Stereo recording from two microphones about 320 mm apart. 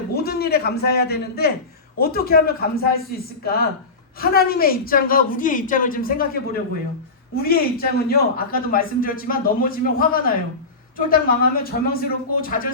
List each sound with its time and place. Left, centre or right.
0.1 s a man's voice: left